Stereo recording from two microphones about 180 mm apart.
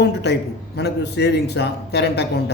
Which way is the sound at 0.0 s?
70° left (ahead or behind).